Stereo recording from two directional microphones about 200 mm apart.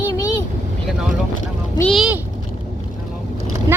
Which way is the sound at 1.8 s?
Centre (ahead or behind).